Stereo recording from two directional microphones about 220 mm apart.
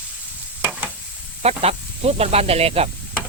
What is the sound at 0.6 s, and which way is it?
Stir, 5° right (ahead or behind).